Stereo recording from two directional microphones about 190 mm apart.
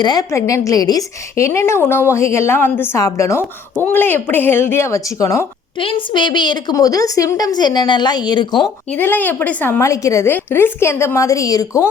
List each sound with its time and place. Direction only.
0.0 s a woman's voice: 20° left (ahead or behind)
5.8 s a woman's voice: 25° left (ahead or behind)
8.9 s a woman's voice: 10° left (ahead or behind)